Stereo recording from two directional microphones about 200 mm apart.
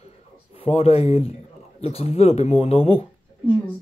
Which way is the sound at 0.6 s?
30° left (ahead or behind).